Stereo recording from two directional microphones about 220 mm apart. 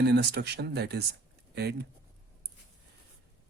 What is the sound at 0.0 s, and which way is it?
Speech, 50° right (ahead or behind).